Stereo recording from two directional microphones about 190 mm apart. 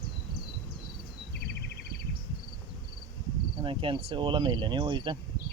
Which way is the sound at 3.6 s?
25° right (ahead or behind).